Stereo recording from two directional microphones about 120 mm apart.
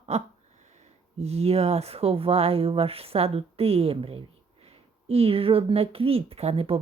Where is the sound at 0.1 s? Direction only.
65° right (ahead or behind).